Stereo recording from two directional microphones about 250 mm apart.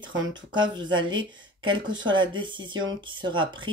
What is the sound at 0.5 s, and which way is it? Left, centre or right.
Speech, centre.